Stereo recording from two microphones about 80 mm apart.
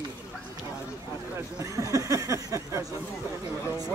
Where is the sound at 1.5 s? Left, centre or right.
Right.